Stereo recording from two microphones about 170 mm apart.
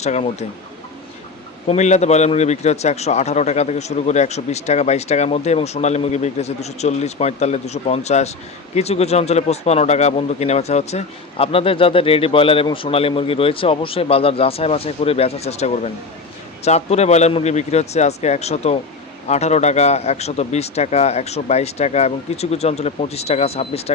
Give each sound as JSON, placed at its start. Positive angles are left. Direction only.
{"t": 0.0, "sound": "speech", "side_deg": 40}
{"t": 1.6, "sound": "speech", "side_deg": 40}